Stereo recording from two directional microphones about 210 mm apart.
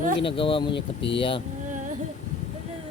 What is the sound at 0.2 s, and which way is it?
Speech, 25° left (ahead or behind).